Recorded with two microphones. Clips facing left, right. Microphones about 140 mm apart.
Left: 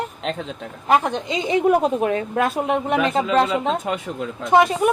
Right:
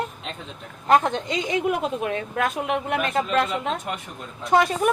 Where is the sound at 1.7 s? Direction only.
35° left (ahead or behind).